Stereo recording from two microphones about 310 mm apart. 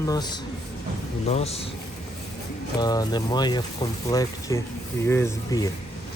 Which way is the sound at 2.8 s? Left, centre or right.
Centre.